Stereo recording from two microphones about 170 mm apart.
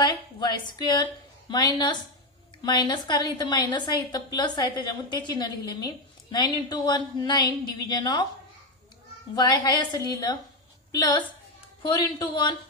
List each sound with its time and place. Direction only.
0.0 s a sound: 25° left (ahead or behind)
1.5 s a woman's voice: 25° left (ahead or behind)
9.3 s a woman's voice: 25° left (ahead or behind)